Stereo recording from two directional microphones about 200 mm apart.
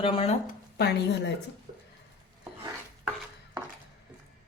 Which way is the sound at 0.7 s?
55° left (ahead or behind).